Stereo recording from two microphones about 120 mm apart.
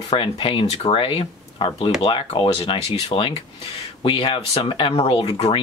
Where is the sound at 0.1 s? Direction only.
45° left (ahead or behind).